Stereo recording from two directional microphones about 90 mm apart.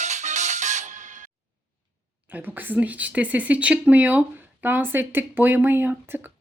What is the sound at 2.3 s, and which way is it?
Speech, 20° right (ahead or behind).